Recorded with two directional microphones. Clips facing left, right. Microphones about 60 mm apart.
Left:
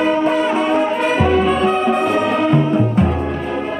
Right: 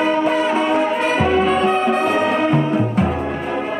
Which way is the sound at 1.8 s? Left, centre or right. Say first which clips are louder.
Left 1 dB; centre.